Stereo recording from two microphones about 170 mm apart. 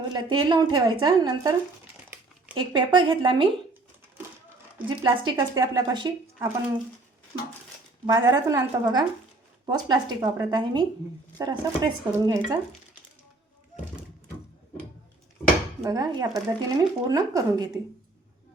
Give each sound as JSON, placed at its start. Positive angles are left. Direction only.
{"t": 0.1, "sound": "speech", "side_deg": -25}
{"t": 2.6, "sound": "speech", "side_deg": -30}
{"t": 4.9, "sound": "speech", "side_deg": -30}
{"t": 8.0, "sound": "speech", "side_deg": -25}
{"t": 15.8, "sound": "speech", "side_deg": -25}